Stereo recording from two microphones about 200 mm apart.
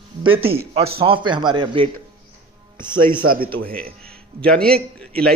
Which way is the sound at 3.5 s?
70° right (ahead or behind).